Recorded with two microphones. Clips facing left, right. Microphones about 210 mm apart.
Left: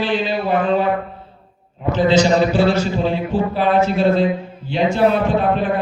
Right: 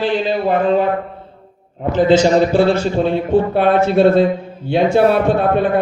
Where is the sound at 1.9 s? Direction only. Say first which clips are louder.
Right 3 dB; 50° right (ahead or behind).